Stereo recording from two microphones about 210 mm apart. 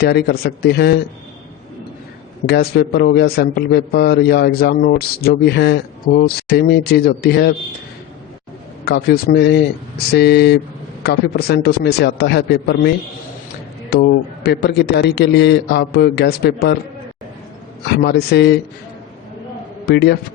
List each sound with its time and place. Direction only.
0.0 s a man's voice: 50° left (ahead or behind)
2.5 s a man's voice: 50° left (ahead or behind)
8.8 s a man's voice: 50° left (ahead or behind)
13.9 s a man's voice: 50° left (ahead or behind)
17.8 s a man's voice: 50° left (ahead or behind)
19.8 s a man's voice: 50° left (ahead or behind)